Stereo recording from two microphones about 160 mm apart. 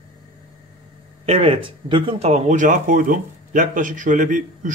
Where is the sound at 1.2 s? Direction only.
35° right (ahead or behind).